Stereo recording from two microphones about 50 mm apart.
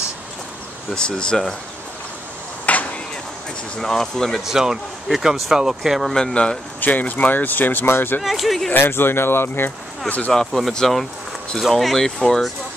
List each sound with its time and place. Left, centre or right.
0.9 s speech: centre
2.6 s a sound: left
3.7 s speech: centre
4.5 s speech: centre
6.1 s speech: centre
6.8 s speech: left
8.2 s speech: centre
8.7 s speech: left
10.0 s speech: left
10.3 s speech: centre